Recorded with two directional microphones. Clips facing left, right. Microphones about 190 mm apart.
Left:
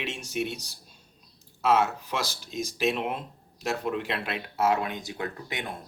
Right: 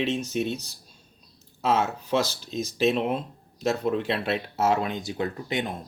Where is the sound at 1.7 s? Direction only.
30° right (ahead or behind).